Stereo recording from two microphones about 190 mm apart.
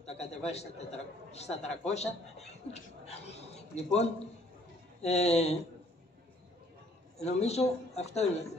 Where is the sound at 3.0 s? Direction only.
35° left (ahead or behind).